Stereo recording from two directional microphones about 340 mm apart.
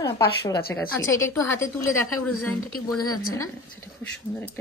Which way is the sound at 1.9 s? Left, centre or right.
Left.